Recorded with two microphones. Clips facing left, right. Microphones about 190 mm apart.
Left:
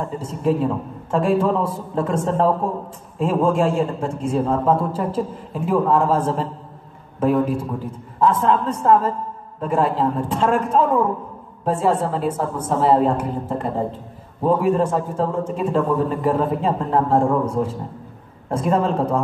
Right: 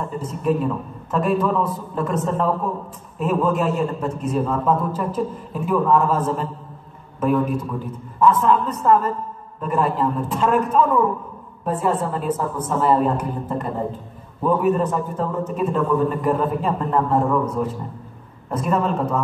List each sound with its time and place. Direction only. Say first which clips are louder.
0.2 s a man's voice: left 1 dB; 25° left (ahead or behind)